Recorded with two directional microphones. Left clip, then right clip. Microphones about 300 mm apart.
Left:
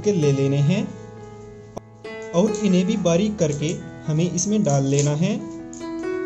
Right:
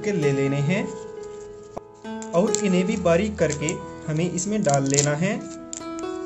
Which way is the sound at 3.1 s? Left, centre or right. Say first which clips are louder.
Right 1 dB; centre.